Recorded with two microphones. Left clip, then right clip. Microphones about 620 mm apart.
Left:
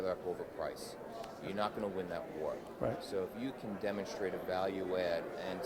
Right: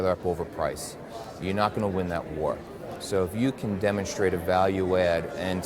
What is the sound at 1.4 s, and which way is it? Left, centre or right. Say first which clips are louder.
Speech: right 12 dB; right.